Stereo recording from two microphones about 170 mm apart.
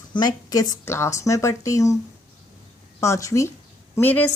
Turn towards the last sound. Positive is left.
turn(degrees=10)  # may be behind; listen again after turning